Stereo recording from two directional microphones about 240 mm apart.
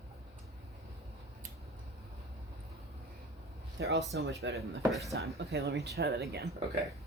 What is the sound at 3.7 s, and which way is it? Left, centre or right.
Speech, right.